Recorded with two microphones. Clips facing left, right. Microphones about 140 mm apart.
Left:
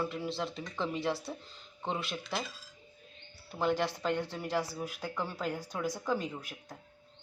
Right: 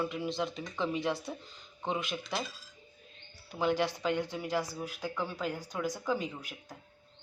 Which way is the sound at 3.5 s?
Centre (ahead or behind).